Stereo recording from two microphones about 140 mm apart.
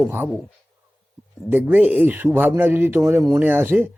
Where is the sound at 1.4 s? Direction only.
10° right (ahead or behind).